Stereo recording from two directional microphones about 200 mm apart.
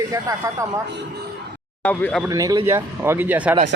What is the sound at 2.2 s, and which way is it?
Speech, 15° right (ahead or behind).